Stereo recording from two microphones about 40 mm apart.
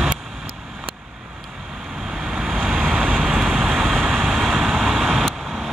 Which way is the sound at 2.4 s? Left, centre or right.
Centre.